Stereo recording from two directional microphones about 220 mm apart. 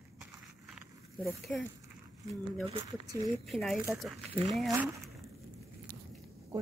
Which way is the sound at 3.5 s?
Centre (ahead or behind).